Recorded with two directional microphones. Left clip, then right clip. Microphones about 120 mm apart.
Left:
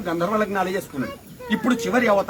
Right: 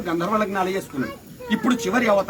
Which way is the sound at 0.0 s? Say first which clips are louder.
Even; 35° left (ahead or behind).